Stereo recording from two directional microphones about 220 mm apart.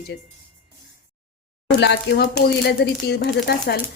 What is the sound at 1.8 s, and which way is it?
Speech, 50° left (ahead or behind).